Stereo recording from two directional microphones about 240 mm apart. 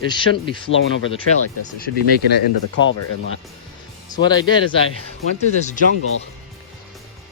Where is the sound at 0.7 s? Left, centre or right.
Left.